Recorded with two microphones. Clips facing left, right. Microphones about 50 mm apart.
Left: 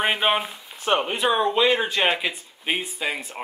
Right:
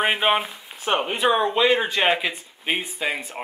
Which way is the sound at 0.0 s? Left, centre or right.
Centre.